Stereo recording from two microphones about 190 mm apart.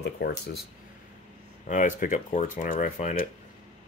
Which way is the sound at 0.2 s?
65° left (ahead or behind).